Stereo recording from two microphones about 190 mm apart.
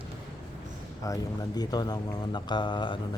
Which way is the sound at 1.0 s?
20° left (ahead or behind).